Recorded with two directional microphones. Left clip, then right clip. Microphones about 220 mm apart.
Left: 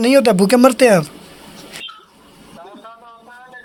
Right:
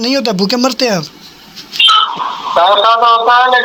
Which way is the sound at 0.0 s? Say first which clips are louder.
Left 2 dB; 15° left (ahead or behind).